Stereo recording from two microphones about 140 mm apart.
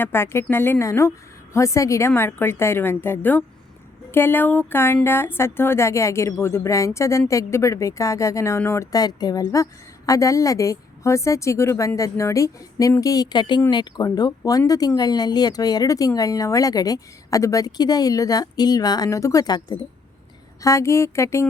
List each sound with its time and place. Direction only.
0.0 s a woman's voice: 15° left (ahead or behind)